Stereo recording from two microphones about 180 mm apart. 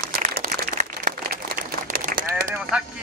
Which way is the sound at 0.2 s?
50° right (ahead or behind).